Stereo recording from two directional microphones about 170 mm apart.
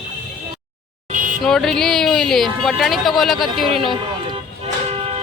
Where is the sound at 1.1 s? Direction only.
50° right (ahead or behind).